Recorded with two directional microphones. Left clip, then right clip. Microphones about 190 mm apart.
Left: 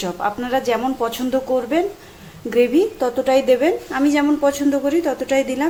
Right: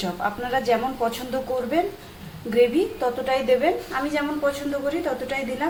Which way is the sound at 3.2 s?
55° left (ahead or behind).